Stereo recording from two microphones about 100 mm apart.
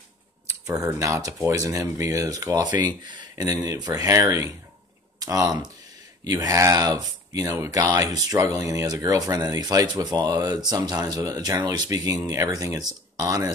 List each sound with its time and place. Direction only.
0.7 s speech: 35° right (ahead or behind)